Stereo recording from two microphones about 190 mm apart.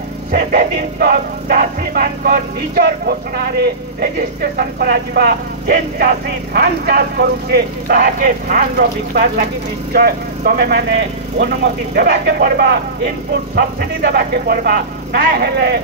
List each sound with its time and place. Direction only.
0.3 s music: 55° right (ahead or behind)
5.9 s speech: 55° right (ahead or behind)
9.9 s music: 55° right (ahead or behind)